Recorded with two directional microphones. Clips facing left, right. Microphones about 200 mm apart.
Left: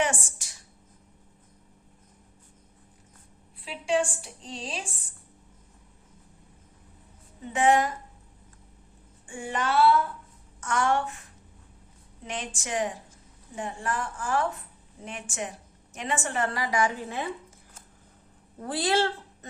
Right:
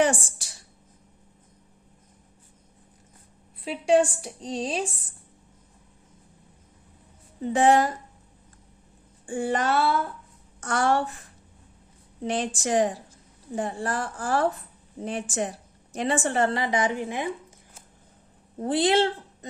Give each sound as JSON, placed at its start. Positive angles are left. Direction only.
{"t": 0.0, "sound": "a sound", "side_deg": -35}
{"t": 3.6, "sound": "a woman's voice", "side_deg": -40}
{"t": 7.4, "sound": "a woman's voice", "side_deg": -35}
{"t": 9.2, "sound": "a woman's voice", "side_deg": -35}
{"t": 12.2, "sound": "a woman's voice", "side_deg": -35}
{"t": 18.6, "sound": "speech", "side_deg": -20}